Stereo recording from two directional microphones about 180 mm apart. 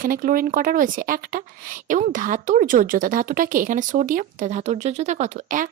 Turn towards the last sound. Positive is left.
turn(degrees=-45)  # may be behind; listen again after turning